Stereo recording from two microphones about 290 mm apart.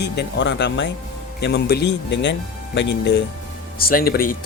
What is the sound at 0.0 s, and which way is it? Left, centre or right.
Speech, left.